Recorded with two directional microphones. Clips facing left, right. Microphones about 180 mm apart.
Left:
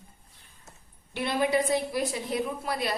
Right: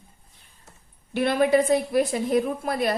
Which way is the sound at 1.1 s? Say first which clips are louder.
Right 6 dB; 55° right (ahead or behind).